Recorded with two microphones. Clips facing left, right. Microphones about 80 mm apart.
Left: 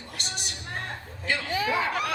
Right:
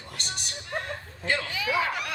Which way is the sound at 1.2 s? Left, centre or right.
Right.